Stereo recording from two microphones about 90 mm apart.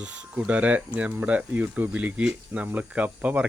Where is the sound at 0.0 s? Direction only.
15° right (ahead or behind).